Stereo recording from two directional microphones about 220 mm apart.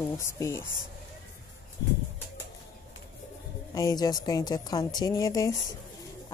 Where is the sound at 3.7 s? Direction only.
15° left (ahead or behind).